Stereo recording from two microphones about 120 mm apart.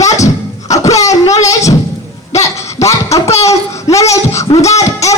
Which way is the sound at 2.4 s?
25° left (ahead or behind).